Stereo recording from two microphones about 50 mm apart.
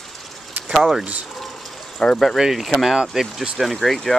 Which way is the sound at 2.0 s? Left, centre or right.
Centre.